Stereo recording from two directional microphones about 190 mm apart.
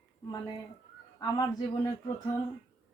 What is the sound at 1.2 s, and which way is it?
Speech, 20° left (ahead or behind).